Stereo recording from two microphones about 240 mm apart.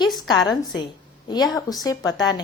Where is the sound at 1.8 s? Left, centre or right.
Centre.